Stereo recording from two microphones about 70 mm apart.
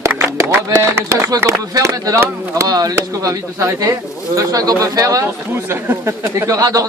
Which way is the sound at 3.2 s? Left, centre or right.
Right.